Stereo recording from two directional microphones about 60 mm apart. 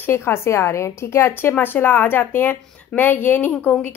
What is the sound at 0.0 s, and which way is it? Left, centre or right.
A woman's voice, left.